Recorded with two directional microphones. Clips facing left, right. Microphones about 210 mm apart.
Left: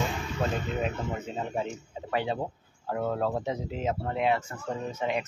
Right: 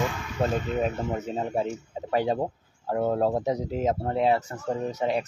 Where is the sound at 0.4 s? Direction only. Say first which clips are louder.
Right 5 dB; 40° right (ahead or behind).